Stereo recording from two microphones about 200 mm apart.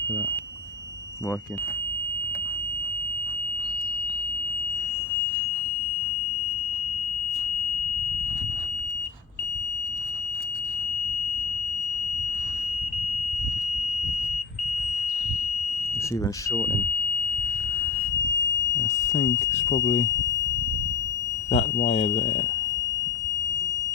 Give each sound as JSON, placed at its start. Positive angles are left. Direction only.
{"t": 16.5, "sound": "speech", "side_deg": 15}
{"t": 18.8, "sound": "speech", "side_deg": 35}
{"t": 21.5, "sound": "speech", "side_deg": 30}